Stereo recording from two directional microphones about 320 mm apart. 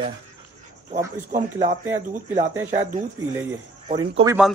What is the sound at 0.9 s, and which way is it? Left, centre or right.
Speech, right.